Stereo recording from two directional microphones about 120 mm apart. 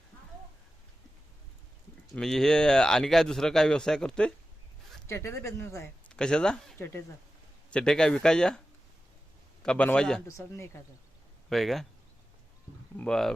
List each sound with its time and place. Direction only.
2.1 s speech: 5° left (ahead or behind)
5.0 s speech: 20° left (ahead or behind)
6.1 s speech: 5° left (ahead or behind)
6.7 s speech: 20° left (ahead or behind)
7.7 s speech: 10° left (ahead or behind)
9.6 s speech: 10° left (ahead or behind)
10.2 s speech: 25° left (ahead or behind)
11.4 s speech: centre (ahead or behind)
13.1 s speech: 5° left (ahead or behind)